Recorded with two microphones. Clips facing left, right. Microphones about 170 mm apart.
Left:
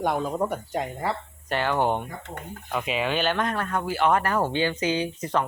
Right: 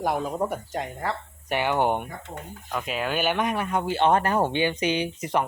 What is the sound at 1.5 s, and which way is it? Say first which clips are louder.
Speech: right 1 dB; 15° right (ahead or behind).